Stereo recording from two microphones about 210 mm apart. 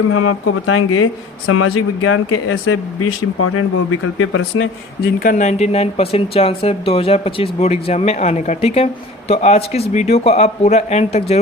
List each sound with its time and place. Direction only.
0.1 s speech: 85° left
4.9 s speech: 45° left (ahead or behind)